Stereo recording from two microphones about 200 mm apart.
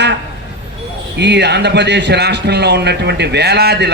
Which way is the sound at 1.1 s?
60° right (ahead or behind).